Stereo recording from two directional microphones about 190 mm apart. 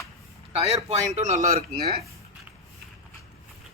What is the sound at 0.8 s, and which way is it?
Speech, 35° right (ahead or behind).